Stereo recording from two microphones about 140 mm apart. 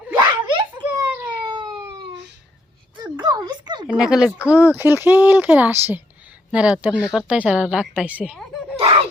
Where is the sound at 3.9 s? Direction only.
5° right (ahead or behind).